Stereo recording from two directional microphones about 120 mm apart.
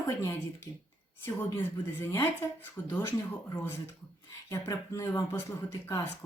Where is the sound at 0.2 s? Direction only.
20° left (ahead or behind).